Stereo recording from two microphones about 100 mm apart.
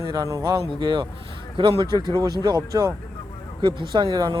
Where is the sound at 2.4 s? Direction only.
40° right (ahead or behind).